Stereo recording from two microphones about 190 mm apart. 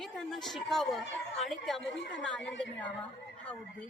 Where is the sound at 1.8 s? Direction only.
75° left (ahead or behind).